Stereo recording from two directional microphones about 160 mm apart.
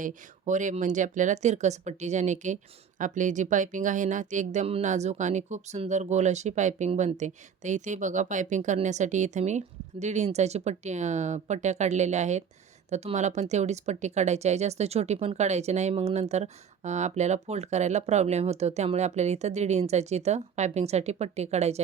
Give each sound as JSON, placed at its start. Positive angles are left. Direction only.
{"t": 0.0, "sound": "speech", "side_deg": -50}